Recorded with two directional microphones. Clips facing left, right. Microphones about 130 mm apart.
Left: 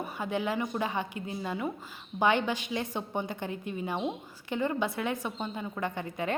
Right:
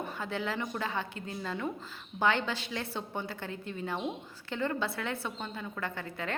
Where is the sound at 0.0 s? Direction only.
15° left (ahead or behind).